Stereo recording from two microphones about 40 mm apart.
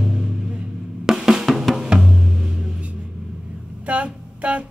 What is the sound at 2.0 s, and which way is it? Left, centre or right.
Music, centre.